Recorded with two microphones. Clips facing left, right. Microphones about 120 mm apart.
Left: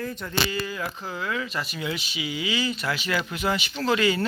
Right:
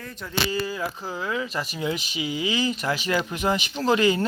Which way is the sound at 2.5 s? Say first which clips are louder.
Right 2 dB; 20° right (ahead or behind).